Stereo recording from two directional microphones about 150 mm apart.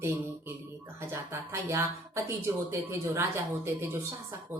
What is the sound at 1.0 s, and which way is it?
Speech, 15° right (ahead or behind).